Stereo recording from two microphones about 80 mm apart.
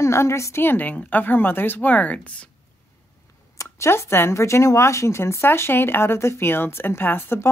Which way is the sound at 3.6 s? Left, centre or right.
Left.